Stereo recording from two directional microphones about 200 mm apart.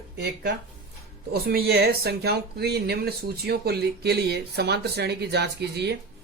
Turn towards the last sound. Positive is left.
turn(degrees=-55)  # may be behind; listen again after turning